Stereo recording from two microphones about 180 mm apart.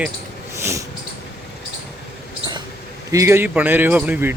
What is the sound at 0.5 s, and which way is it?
Dog, 15° right (ahead or behind).